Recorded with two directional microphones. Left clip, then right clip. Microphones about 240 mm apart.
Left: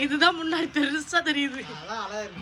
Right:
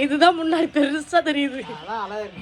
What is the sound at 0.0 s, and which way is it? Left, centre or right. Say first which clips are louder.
A man's voice: right 5 dB; centre.